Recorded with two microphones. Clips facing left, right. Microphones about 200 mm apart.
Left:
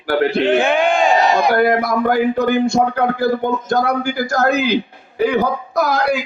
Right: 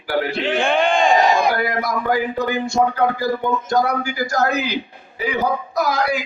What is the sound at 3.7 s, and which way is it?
A man's voice, 60° left (ahead or behind).